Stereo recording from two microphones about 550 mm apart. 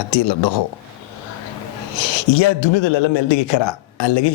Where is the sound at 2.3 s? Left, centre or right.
Left.